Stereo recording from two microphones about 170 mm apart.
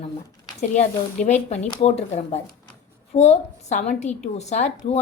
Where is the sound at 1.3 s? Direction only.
40° left (ahead or behind).